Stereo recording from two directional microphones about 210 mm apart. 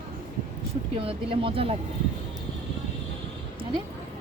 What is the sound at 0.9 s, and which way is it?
Speech, 25° right (ahead or behind).